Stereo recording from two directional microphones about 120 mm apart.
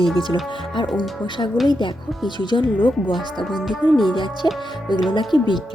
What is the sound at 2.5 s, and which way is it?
Speech, 35° left (ahead or behind).